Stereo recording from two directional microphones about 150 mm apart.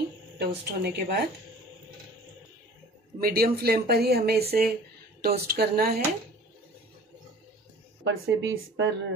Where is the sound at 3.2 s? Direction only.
85° right.